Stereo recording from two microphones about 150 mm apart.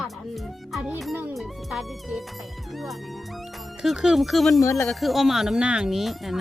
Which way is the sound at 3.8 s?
Centre (ahead or behind).